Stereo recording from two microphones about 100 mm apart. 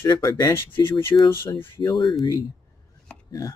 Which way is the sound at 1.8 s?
45° left (ahead or behind).